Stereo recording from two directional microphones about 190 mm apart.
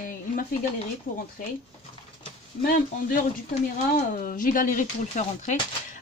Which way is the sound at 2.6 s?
50° left (ahead or behind).